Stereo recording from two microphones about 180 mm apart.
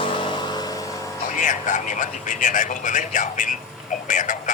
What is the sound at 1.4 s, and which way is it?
A man's voice, 45° left (ahead or behind).